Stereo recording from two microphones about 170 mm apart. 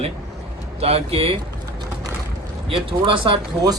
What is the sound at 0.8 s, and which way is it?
Speech, 35° right (ahead or behind).